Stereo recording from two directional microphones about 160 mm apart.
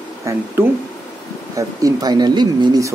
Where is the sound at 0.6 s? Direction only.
15° right (ahead or behind).